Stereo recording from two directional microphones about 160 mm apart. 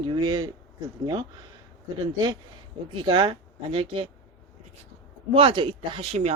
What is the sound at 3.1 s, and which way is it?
Speech, 35° right (ahead or behind).